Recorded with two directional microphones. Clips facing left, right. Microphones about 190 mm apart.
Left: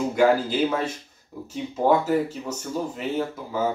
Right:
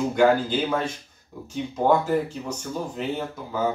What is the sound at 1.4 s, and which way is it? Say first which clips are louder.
Speech: even; 5° left (ahead or behind).